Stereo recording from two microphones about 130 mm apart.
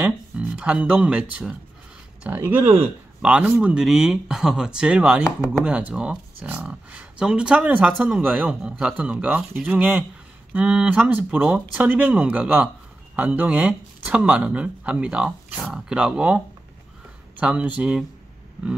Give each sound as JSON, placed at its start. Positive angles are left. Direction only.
{"t": 0.0, "sound": "speech", "side_deg": -10}